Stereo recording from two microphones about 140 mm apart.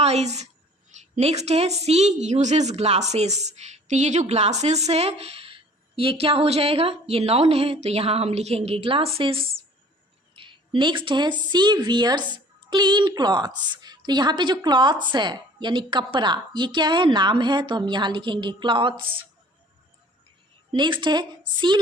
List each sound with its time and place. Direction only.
0.0 s a woman's voice: 50° right (ahead or behind)
20.7 s a woman's voice: 35° right (ahead or behind)